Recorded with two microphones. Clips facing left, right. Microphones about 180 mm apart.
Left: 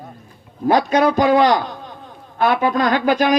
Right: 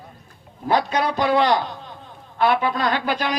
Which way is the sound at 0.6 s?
45° left (ahead or behind).